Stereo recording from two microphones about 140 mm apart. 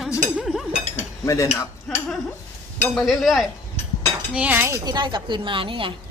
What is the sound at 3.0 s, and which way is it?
Speech, centre (ahead or behind).